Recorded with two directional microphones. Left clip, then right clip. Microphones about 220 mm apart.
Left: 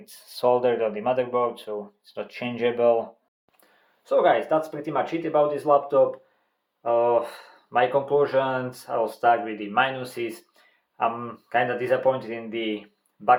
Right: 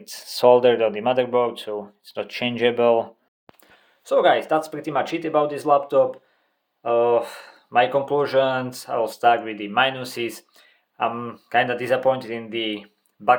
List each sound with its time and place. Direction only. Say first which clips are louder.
0.0 s speech: right 6 dB; 35° right (ahead or behind)